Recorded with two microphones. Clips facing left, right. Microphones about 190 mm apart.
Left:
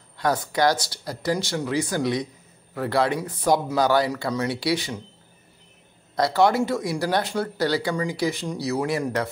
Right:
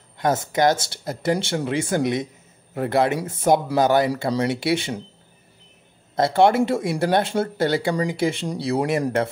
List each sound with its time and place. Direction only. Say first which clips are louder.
0.2 s speech: right 2 dB; 20° right (ahead or behind)
6.1 s speech: right 3 dB; 25° right (ahead or behind)